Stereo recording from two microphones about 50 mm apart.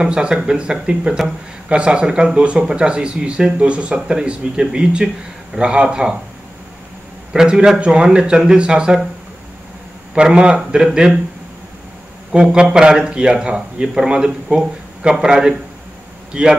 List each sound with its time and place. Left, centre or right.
0.0 s a man's voice: centre
7.3 s a man's voice: centre
10.1 s a man's voice: right
12.3 s a man's voice: centre